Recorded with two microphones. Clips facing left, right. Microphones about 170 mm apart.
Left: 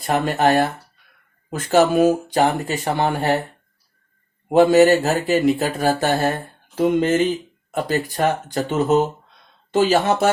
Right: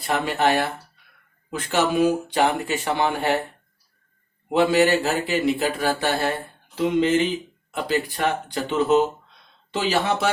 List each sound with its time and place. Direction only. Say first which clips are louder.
0.0 s speech: left 4 dB; 45° left (ahead or behind)
4.4 s speech: left 6 dB; 45° left (ahead or behind)